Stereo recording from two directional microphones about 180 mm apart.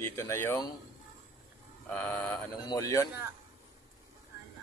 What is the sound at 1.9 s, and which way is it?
Speech, 5° left (ahead or behind).